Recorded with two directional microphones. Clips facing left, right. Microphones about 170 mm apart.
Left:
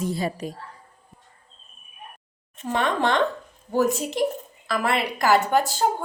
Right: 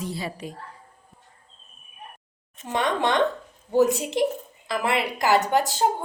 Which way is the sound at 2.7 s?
20° right (ahead or behind).